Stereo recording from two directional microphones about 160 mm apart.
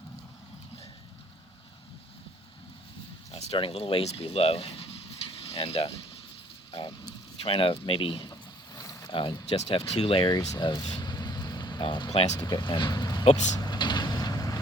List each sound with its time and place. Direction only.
3.3 s speech: 35° left (ahead or behind)
10.5 s vehicle: 25° left (ahead or behind)
12.4 s speech: 25° left (ahead or behind)
13.6 s vehicle: 25° left (ahead or behind)